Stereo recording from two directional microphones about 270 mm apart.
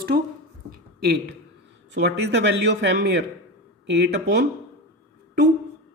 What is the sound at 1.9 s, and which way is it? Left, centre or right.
Speech, right.